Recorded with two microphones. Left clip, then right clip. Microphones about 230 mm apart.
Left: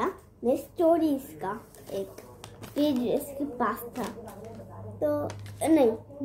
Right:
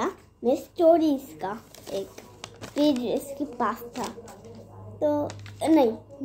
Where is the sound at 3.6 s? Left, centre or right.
Right.